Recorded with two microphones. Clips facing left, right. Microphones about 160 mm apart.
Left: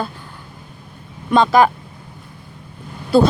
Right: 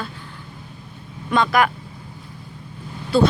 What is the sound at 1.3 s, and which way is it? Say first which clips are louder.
Speech: left 5 dB; 25° left (ahead or behind).